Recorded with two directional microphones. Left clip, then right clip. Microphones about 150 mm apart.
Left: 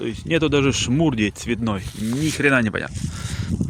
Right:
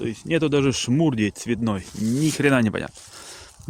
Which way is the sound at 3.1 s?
5° right (ahead or behind).